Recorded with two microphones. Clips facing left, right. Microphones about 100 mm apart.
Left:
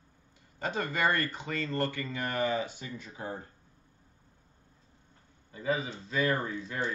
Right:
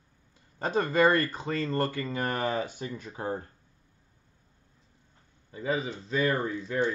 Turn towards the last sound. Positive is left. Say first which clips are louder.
# right 2 dB
turn(degrees=-35)  # may be behind; listen again after turning